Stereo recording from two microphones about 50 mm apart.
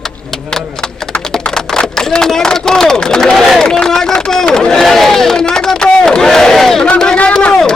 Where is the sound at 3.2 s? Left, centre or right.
Centre.